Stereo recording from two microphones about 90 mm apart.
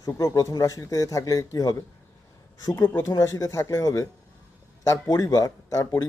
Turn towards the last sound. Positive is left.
turn(degrees=35)  # may be behind; listen again after turning